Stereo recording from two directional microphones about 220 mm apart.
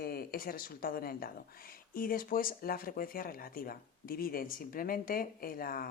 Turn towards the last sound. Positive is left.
turn(degrees=40)  # may be behind; listen again after turning